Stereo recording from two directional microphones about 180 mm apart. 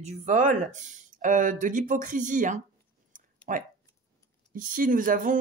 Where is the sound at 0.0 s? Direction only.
45° right (ahead or behind).